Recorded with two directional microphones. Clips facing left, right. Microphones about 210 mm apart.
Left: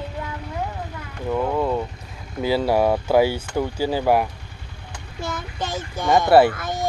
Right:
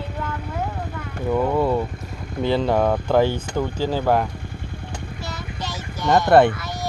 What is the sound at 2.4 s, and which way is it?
Speech, 5° left (ahead or behind).